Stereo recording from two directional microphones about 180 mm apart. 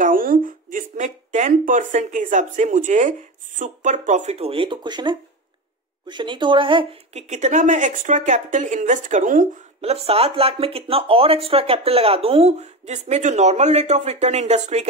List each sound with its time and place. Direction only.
0.0 s speech: 50° right (ahead or behind)